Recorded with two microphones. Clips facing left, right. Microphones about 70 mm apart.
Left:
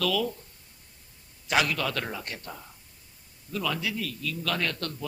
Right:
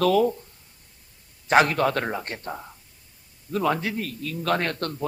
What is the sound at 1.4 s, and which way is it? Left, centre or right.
A man's voice, right.